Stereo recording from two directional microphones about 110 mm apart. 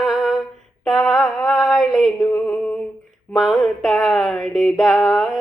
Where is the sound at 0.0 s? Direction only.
5° right (ahead or behind).